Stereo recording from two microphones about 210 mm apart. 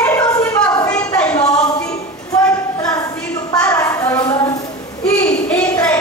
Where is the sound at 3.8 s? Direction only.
15° left (ahead or behind).